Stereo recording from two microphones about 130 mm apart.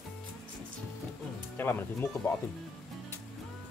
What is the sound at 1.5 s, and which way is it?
Speech, 15° left (ahead or behind).